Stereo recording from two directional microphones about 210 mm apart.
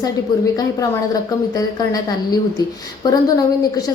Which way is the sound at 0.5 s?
15° left (ahead or behind).